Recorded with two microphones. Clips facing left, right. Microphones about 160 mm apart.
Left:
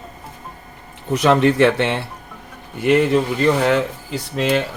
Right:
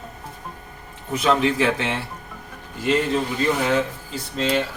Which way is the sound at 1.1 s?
70° left (ahead or behind).